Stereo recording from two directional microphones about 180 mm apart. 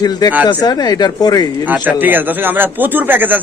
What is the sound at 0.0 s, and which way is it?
Speech, 20° left (ahead or behind).